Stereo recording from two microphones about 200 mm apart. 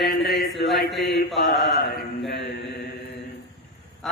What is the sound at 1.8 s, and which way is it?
Mantra, 55° left (ahead or behind).